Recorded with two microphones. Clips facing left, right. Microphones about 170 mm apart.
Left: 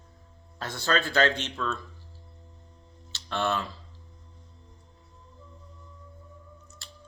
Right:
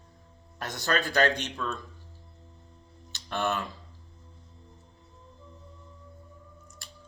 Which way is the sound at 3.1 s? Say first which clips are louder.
Left 1 dB; 15° right (ahead or behind).